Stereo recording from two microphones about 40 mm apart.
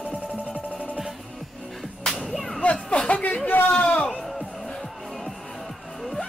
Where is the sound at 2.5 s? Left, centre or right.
Left.